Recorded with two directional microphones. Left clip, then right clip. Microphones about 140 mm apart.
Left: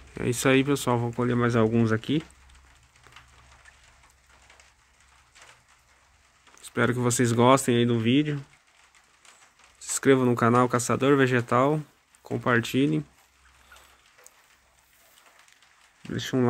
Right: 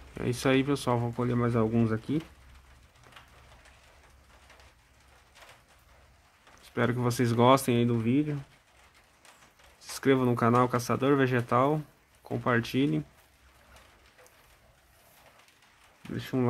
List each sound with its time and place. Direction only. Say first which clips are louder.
0.1 s speech: left 4 dB; 20° left (ahead or behind)
6.6 s speech: left 4 dB; 20° left (ahead or behind)
9.9 s speech: left 4 dB; 20° left (ahead or behind)
16.1 s speech: left 6 dB; 30° left (ahead or behind)